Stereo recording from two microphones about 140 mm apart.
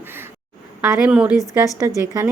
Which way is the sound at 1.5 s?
25° right (ahead or behind).